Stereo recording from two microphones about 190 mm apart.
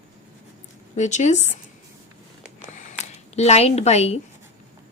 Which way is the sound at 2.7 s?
35° left (ahead or behind).